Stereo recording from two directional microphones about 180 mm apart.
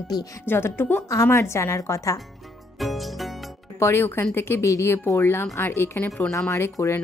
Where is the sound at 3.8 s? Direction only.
15° left (ahead or behind).